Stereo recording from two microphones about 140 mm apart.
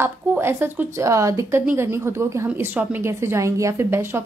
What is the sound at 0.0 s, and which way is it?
A woman's voice, 15° right (ahead or behind).